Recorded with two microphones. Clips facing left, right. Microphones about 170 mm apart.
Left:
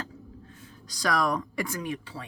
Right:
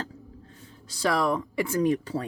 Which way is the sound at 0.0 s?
30° right (ahead or behind).